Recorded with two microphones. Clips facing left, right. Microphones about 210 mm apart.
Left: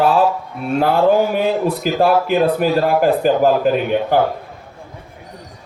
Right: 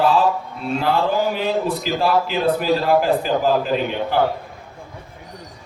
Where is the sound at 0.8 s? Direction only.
50° left (ahead or behind).